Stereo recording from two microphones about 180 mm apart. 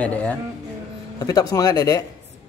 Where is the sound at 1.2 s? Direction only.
20° left (ahead or behind).